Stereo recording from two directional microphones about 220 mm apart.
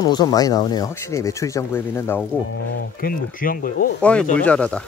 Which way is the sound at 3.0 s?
40° left (ahead or behind).